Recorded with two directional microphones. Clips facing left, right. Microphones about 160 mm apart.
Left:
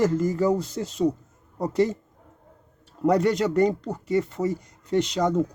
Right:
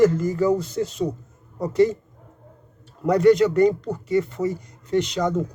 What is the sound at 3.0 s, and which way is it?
Speech, 35° left (ahead or behind).